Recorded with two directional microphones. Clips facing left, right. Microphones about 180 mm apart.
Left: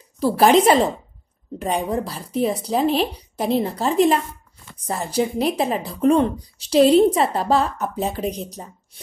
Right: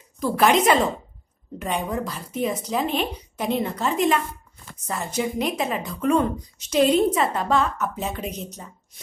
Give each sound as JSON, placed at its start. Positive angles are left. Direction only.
{"t": 0.2, "sound": "a woman's voice", "side_deg": 35}